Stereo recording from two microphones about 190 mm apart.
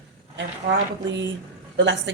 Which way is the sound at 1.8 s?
70° right (ahead or behind).